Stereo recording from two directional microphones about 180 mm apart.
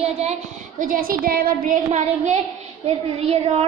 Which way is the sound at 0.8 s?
50° right (ahead or behind).